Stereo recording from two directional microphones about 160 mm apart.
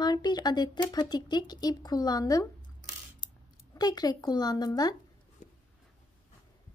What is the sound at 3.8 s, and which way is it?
Speech, 25° left (ahead or behind).